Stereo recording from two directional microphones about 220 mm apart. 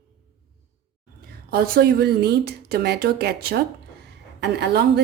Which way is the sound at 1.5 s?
45° right (ahead or behind).